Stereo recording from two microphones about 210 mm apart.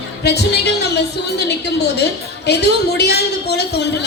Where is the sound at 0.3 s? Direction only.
50° left (ahead or behind).